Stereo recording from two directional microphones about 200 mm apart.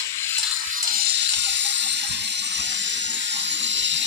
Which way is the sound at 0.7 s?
55° right (ahead or behind).